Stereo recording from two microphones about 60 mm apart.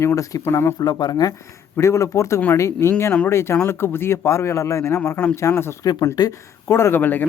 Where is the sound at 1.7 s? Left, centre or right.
Left.